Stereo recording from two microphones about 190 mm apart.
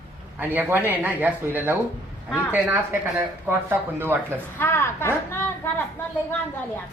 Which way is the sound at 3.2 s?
10° right (ahead or behind).